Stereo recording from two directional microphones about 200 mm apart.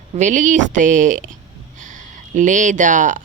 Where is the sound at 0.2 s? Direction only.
40° right (ahead or behind).